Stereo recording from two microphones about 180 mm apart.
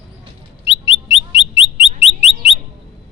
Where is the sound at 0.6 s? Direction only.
30° left (ahead or behind).